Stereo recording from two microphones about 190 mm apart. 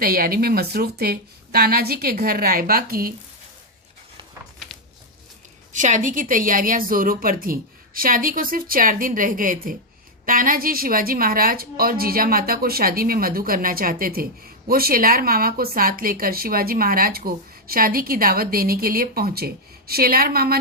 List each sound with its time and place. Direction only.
0.0 s a woman's voice: 50° right (ahead or behind)
5.7 s a woman's voice: 40° right (ahead or behind)